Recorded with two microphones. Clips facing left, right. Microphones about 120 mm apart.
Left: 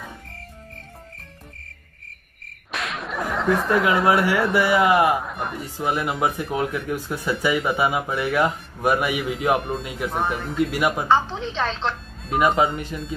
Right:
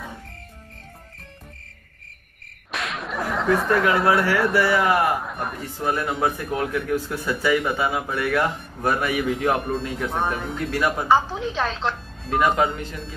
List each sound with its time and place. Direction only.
2.7 s whip: centre (ahead or behind)
4.0 s speech: 15° left (ahead or behind)
5.2 s a man's voice: centre (ahead or behind)
5.6 s speech: 15° left (ahead or behind)
11.1 s a woman's voice: 10° right (ahead or behind)
12.3 s speech: 20° left (ahead or behind)